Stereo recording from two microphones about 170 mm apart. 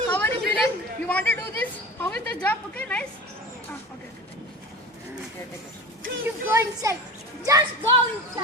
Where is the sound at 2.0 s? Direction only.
10° left (ahead or behind).